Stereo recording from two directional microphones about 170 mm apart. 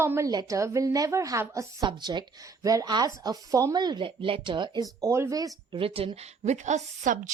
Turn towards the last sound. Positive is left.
turn(degrees=-50)  # may be behind; listen again after turning